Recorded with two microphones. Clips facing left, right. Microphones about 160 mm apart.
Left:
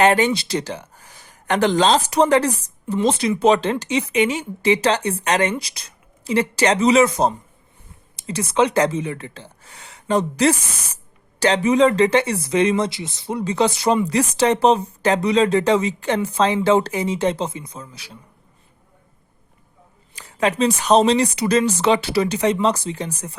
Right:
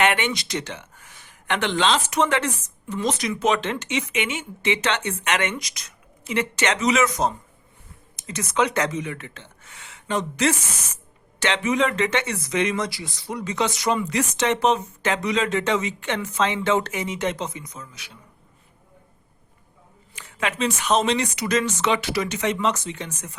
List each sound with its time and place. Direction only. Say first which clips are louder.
0.0 s speech: left 6 dB; 35° left (ahead or behind)
20.1 s speech: left 7 dB; 35° left (ahead or behind)